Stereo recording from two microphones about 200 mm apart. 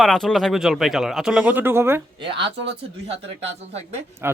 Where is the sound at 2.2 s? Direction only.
25° right (ahead or behind).